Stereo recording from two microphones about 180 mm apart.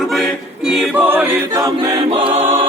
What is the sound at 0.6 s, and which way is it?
Choir, centre (ahead or behind).